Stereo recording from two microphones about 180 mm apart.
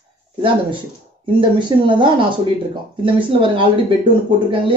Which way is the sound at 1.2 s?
25° right (ahead or behind).